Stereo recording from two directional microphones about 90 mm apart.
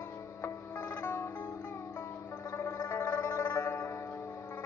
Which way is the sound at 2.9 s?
30° left (ahead or behind).